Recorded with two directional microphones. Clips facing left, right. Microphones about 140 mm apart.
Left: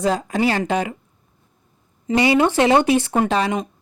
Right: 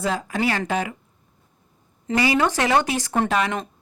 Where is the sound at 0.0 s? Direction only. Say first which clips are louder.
Left 4 dB; 30° left (ahead or behind).